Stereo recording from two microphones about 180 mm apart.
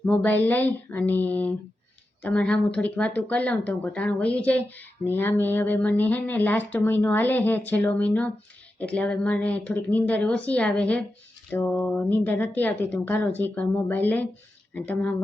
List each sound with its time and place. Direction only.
0.0 s speech: 10° left (ahead or behind)